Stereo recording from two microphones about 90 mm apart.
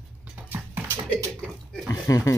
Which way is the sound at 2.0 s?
35° left (ahead or behind).